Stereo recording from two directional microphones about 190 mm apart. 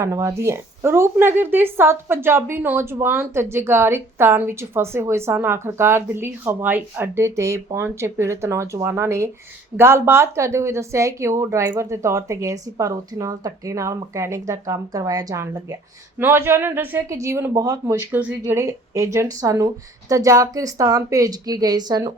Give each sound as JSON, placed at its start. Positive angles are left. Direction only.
{"t": 0.0, "sound": "a woman's voice", "side_deg": -15}